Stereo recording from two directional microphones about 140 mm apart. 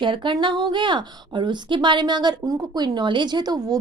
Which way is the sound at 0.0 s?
35° right (ahead or behind).